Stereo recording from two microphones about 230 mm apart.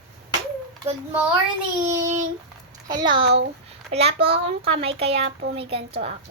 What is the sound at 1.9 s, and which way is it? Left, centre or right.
Child singing, centre.